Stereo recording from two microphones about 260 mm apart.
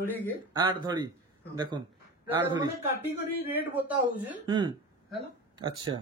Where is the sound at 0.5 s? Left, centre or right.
Centre.